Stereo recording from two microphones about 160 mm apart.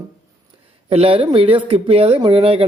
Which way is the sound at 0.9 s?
35° right (ahead or behind).